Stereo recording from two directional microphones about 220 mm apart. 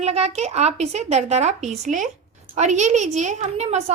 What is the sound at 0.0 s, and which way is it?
A woman's voice, 30° right (ahead or behind).